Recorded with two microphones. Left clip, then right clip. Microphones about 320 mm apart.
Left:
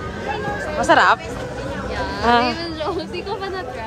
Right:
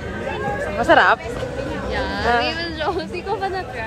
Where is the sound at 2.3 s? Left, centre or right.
Centre.